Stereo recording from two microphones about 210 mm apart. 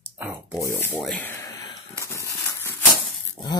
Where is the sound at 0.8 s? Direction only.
10° left (ahead or behind).